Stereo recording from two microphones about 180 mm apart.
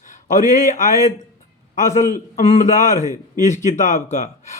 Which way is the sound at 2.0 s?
45° left (ahead or behind).